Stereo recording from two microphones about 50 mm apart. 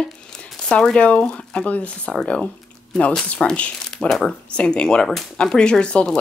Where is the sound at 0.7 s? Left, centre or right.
Centre.